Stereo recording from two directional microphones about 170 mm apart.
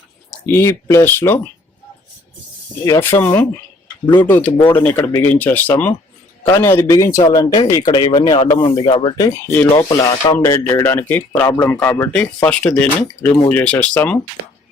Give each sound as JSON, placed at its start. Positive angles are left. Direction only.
{"t": 0.4, "sound": "speech", "side_deg": 15}
{"t": 2.8, "sound": "speech", "side_deg": 15}
{"t": 9.1, "sound": "speech", "side_deg": 15}